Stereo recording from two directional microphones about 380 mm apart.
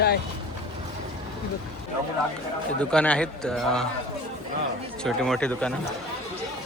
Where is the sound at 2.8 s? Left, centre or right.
Centre.